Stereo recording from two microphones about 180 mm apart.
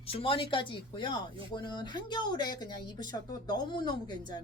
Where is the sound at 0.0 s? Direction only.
30° left (ahead or behind).